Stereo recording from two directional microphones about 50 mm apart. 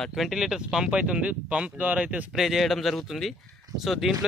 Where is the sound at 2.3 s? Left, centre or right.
Centre.